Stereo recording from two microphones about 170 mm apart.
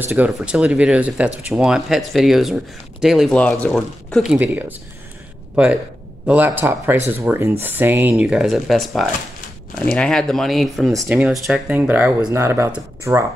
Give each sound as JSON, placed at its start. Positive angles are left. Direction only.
{"t": 0.0, "sound": "speech", "side_deg": -5}
{"t": 6.2, "sound": "speech", "side_deg": -10}
{"t": 10.9, "sound": "speech", "side_deg": -20}
{"t": 11.4, "sound": "speech", "side_deg": -5}